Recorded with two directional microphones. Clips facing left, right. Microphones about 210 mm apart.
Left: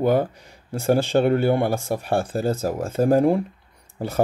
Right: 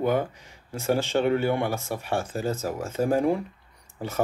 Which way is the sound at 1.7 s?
50° left (ahead or behind).